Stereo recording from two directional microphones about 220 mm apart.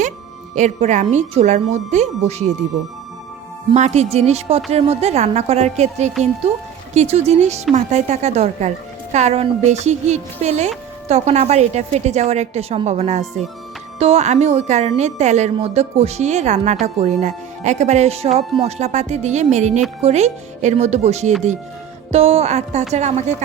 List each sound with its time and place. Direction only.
0.5 s a woman's voice: 35° right (ahead or behind)
3.7 s a woman's voice: 30° right (ahead or behind)